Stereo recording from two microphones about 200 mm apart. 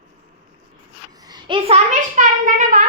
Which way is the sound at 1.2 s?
20° right (ahead or behind).